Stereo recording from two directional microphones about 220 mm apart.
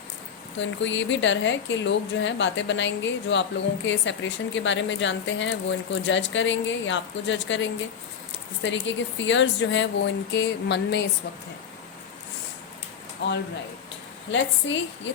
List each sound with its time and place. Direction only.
0.6 s speech: 55° left (ahead or behind)
13.2 s speech: 50° left (ahead or behind)